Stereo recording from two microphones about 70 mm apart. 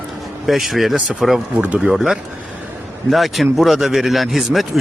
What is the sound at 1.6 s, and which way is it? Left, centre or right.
Speech, centre.